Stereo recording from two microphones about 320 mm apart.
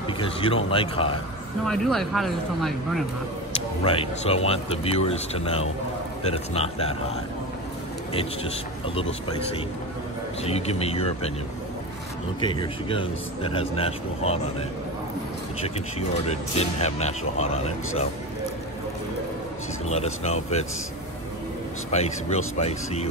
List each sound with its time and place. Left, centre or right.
0.2 s speech: centre
1.7 s speech: centre
3.5 s speech: centre
8.1 s speech: centre
10.4 s speech: centre
12.4 s speech: centre
15.6 s speech: centre
19.9 s speech: centre
21.9 s speech: centre